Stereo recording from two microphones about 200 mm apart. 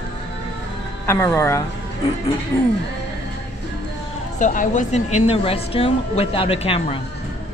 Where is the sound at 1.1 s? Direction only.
15° left (ahead or behind).